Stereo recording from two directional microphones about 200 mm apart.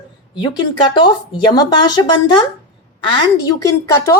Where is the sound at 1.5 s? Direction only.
20° left (ahead or behind).